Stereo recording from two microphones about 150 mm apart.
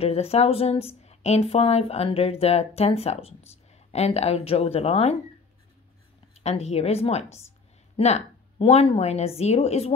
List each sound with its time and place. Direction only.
0.0 s a woman's voice: 45° left (ahead or behind)
6.3 s a woman's voice: 45° left (ahead or behind)